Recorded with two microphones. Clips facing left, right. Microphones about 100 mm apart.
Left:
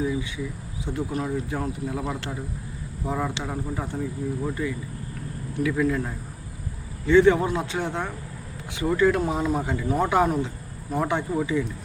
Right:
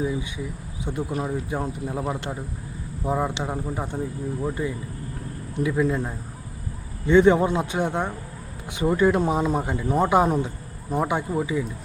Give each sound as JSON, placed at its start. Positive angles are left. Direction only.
{"t": 0.9, "sound": "speech", "side_deg": -20}